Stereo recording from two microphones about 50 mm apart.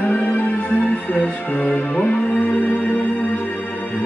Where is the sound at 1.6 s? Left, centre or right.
Centre.